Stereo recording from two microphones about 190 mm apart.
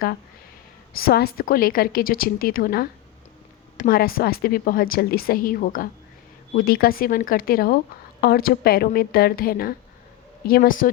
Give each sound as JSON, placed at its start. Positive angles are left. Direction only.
{"t": 0.9, "sound": "a woman's voice", "side_deg": 55}